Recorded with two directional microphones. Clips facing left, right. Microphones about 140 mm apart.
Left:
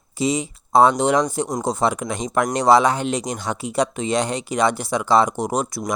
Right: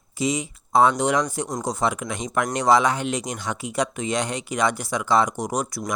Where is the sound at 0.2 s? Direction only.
30° left (ahead or behind).